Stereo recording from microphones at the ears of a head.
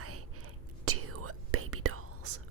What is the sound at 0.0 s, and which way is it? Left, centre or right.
Whispering, right.